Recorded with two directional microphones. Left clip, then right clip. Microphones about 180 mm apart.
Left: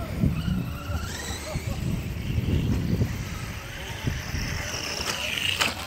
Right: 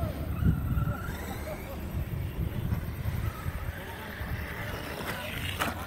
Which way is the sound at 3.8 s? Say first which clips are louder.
Left 6 dB; 15° left (ahead or behind).